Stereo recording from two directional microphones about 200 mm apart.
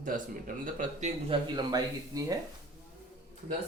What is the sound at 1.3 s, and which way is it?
Speech, 20° right (ahead or behind).